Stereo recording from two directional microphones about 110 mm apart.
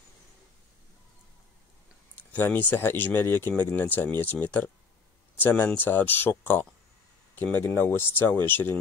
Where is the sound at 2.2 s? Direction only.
15° left (ahead or behind).